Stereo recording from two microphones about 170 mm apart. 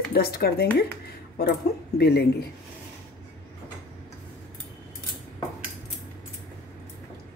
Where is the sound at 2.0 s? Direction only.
75° left (ahead or behind).